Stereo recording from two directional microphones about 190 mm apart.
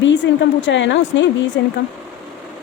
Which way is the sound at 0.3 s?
70° left (ahead or behind).